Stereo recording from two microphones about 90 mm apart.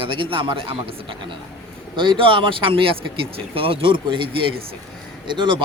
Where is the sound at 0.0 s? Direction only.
75° right (ahead or behind).